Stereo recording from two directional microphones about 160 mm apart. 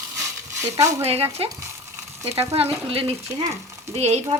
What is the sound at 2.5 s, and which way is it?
Speech, 40° right (ahead or behind).